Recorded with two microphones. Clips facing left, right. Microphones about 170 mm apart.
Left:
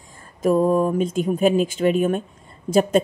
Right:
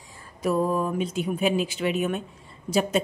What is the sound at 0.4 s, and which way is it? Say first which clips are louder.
A woman's voice: left 6 dB; 45° left (ahead or behind).